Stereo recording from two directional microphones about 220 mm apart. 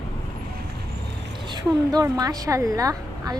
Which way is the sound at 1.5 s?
15° right (ahead or behind).